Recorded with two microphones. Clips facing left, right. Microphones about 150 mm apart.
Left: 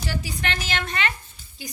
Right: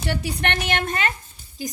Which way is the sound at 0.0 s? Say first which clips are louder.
Right 4 dB; 60° right (ahead or behind).